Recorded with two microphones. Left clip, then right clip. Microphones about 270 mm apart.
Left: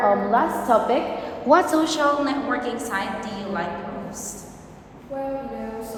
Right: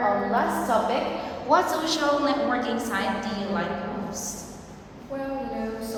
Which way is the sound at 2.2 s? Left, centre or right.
Centre.